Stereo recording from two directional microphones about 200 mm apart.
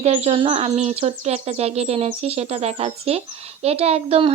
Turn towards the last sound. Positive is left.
turn(degrees=-30)  # may be behind; listen again after turning